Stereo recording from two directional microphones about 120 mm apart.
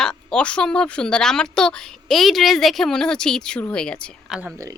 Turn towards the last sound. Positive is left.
turn(degrees=-30)  # may be behind; listen again after turning